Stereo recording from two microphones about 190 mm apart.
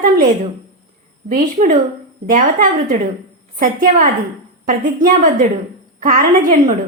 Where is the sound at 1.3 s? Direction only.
45° right (ahead or behind).